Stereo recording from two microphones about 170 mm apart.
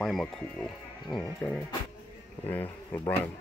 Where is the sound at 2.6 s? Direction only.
25° left (ahead or behind).